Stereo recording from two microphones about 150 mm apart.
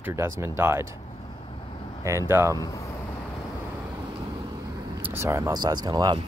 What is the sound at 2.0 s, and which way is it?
Speech, 15° right (ahead or behind).